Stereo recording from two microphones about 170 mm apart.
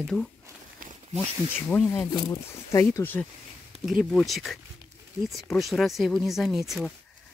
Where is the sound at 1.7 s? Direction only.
15° left (ahead or behind).